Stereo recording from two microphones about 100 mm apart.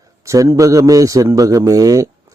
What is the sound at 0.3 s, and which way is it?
A man's voice, 30° right (ahead or behind).